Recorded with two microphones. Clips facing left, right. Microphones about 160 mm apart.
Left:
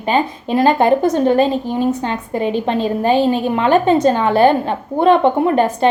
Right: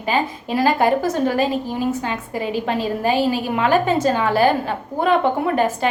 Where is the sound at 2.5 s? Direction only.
25° left (ahead or behind).